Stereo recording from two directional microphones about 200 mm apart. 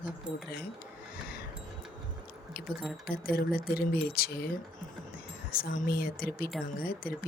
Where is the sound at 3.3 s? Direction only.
50° left (ahead or behind).